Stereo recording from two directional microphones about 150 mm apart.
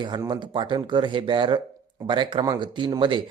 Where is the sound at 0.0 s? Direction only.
30° right (ahead or behind).